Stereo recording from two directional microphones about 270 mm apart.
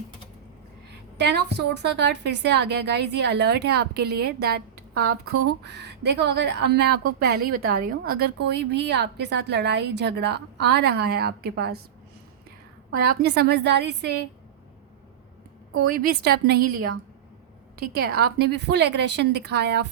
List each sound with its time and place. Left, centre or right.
1.2 s a woman's voice: right
13.1 s a woman's voice: right
15.9 s a woman's voice: right